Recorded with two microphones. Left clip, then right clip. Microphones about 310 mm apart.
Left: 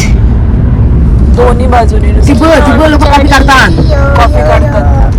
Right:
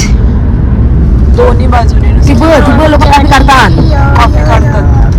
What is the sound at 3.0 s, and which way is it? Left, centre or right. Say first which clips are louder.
Speech: even; centre.